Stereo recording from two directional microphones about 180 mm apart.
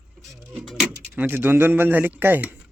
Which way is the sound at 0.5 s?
Centre (ahead or behind).